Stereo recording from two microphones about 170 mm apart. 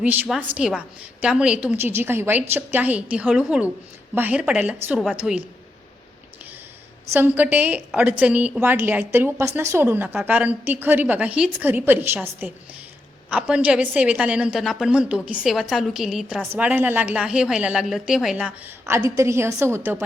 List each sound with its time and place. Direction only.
0.0 s a woman's voice: 5° right (ahead or behind)
7.1 s a woman's voice: 10° right (ahead or behind)